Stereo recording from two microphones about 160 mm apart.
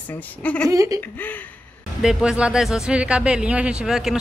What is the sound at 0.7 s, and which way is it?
Laughter, 20° right (ahead or behind).